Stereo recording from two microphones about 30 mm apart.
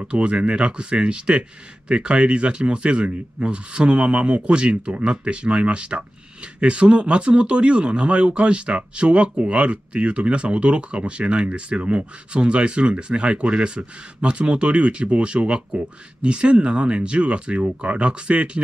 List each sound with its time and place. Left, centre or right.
0.0 s speech: right